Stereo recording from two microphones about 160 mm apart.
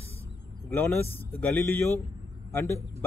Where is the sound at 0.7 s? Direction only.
10° left (ahead or behind).